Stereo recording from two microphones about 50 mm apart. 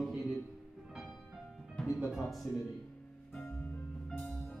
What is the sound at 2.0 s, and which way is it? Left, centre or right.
Speech, centre.